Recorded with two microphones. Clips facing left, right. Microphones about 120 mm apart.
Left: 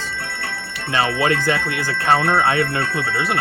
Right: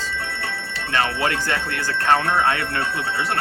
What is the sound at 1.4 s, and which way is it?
Speech, 15° left (ahead or behind).